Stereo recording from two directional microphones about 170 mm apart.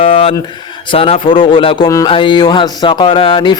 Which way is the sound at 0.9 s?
30° left (ahead or behind).